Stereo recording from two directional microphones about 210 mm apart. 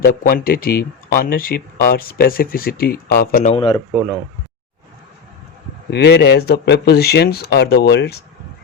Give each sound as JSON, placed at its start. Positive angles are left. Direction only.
{"t": 0.0, "sound": "speech", "side_deg": 40}
{"t": 3.4, "sound": "speech", "side_deg": 25}
{"t": 3.9, "sound": "speech", "side_deg": -5}
{"t": 5.9, "sound": "speech", "side_deg": 50}